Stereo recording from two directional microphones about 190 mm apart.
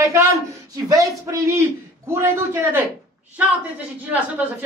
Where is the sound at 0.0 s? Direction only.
15° right (ahead or behind).